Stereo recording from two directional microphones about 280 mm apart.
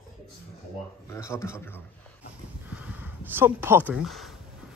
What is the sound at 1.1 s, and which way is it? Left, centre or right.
Speech, centre.